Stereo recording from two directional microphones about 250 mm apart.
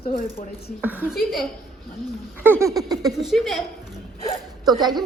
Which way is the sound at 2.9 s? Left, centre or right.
Centre.